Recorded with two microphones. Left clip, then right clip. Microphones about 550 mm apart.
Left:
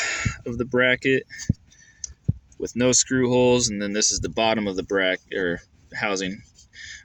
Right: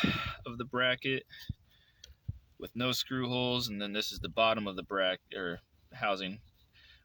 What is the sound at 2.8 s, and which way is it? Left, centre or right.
Speech, right.